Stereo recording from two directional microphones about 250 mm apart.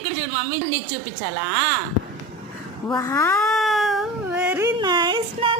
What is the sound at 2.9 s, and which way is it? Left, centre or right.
Speech, centre.